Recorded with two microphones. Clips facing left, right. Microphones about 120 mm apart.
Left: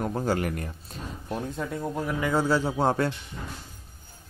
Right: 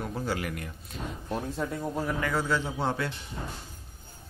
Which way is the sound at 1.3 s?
Centre (ahead or behind).